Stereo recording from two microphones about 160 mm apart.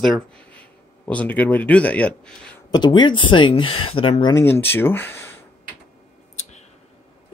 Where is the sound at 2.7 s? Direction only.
30° left (ahead or behind).